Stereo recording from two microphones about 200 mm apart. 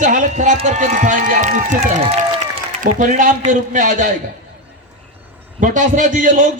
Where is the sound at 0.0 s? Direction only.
40° right (ahead or behind).